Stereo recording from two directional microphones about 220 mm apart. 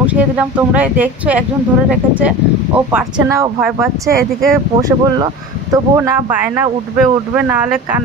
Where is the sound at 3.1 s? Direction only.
15° right (ahead or behind).